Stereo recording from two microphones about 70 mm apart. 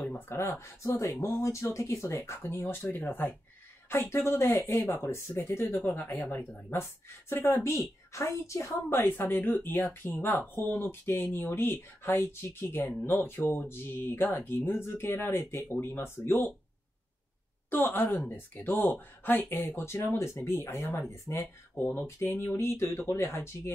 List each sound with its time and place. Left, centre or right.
0.3 s speech: left
7.4 s a woman's voice: left
8.8 s speech: left
17.6 s speech: left